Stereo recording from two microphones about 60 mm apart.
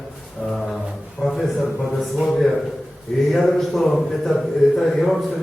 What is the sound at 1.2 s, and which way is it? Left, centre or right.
A man's voice, centre.